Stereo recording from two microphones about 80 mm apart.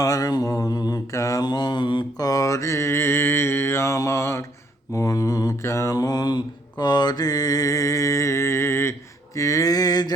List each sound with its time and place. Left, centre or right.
0.0 s mantra: left
1.1 s mantra: left
1.5 s mantra: left
2.1 s mantra: left